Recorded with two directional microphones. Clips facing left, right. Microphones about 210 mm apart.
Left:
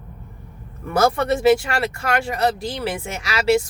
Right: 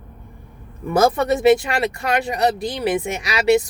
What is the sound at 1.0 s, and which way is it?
Speech, 20° right (ahead or behind).